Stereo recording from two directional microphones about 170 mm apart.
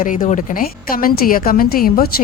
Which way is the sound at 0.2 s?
45° left (ahead or behind).